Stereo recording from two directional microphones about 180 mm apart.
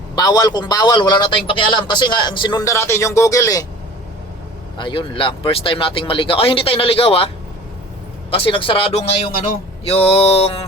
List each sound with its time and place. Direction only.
0.2 s a man's voice: 25° left (ahead or behind)
4.8 s a man's voice: 30° left (ahead or behind)
8.3 s a man's voice: 30° left (ahead or behind)
9.8 s mantra: 35° left (ahead or behind)